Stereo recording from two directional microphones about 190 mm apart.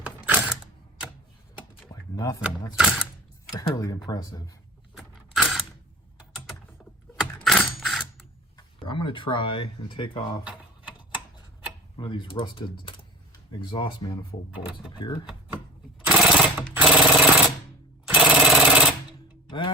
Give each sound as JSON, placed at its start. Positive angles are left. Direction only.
{"t": 0.0, "sound": "a sound", "side_deg": -10}
{"t": 1.9, "sound": "a sound", "side_deg": 20}
{"t": 2.4, "sound": "speech", "side_deg": -5}
{"t": 3.5, "sound": "speech", "side_deg": 20}
{"t": 4.9, "sound": "keys jangling", "side_deg": 0}
{"t": 7.3, "sound": "coin", "side_deg": 5}
{"t": 8.5, "sound": "speech", "side_deg": 25}
{"t": 10.4, "sound": "typewriter", "side_deg": -5}
{"t": 11.9, "sound": "speech", "side_deg": 25}
{"t": 16.0, "sound": "jackhammer", "side_deg": 0}
{"t": 19.5, "sound": "music", "side_deg": 25}